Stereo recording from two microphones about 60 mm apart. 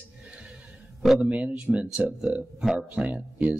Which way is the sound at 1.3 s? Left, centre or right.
Right.